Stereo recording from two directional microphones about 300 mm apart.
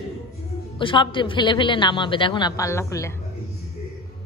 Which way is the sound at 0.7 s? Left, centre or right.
Centre.